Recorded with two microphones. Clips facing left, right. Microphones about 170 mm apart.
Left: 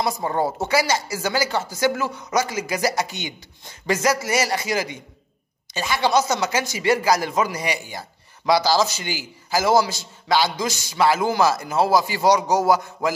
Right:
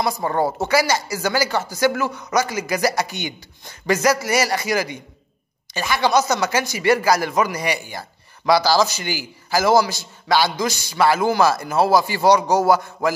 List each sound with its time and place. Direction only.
0.2 s a woman's voice: 60° right (ahead or behind)
0.7 s a man's voice: 25° left (ahead or behind)
2.0 s a woman's voice: 65° right (ahead or behind)
2.3 s a man's voice: 25° left (ahead or behind)